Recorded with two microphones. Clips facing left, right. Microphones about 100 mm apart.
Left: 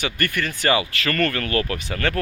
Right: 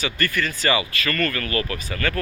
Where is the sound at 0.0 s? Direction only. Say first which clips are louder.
Even; 55° left (ahead or behind).